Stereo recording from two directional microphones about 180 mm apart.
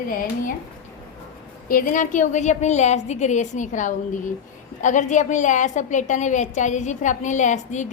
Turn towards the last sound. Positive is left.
turn(degrees=40)  # may be behind; listen again after turning